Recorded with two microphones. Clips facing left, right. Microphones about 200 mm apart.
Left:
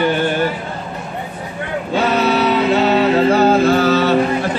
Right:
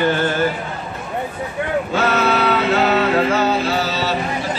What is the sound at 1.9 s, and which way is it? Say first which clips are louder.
Music: left 4 dB; 15° left (ahead or behind).